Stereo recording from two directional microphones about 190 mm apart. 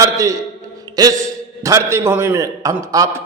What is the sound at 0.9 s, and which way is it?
A man's voice, 20° right (ahead or behind).